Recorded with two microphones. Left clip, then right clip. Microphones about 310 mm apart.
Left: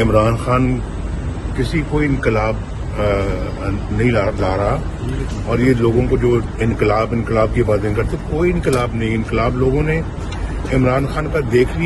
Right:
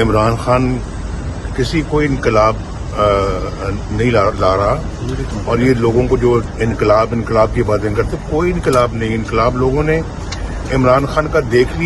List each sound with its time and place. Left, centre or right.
0.0 s a man's voice: centre